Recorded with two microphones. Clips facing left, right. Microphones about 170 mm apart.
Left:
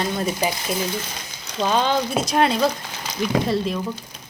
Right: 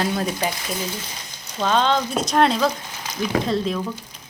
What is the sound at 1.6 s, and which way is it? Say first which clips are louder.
Speech: even; 5° left (ahead or behind).